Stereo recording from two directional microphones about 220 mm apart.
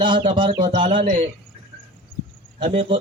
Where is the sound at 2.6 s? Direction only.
35° right (ahead or behind).